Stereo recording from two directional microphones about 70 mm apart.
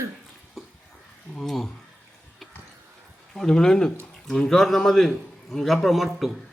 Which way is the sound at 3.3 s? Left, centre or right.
Centre.